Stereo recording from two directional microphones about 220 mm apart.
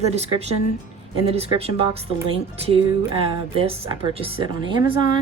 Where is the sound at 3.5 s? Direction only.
25° right (ahead or behind).